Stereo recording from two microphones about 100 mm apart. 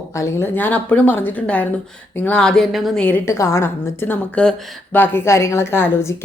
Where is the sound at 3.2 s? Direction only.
30° left (ahead or behind).